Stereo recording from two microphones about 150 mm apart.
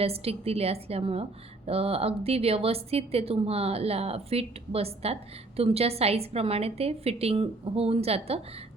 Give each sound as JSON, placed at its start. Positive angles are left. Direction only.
{"t": 0.0, "sound": "a woman's voice", "side_deg": -40}